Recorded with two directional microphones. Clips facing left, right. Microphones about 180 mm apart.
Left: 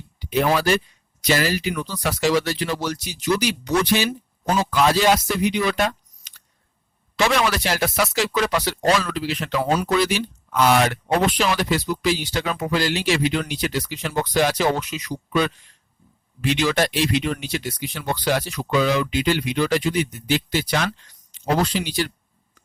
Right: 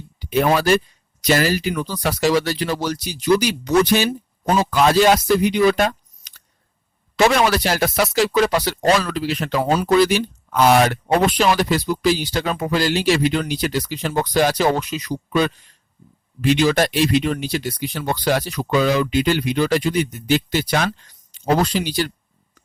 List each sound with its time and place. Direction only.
0.2 s a sound: 45° right (ahead or behind)
0.5 s speech: 40° right (ahead or behind)
7.3 s speech: 40° right (ahead or behind)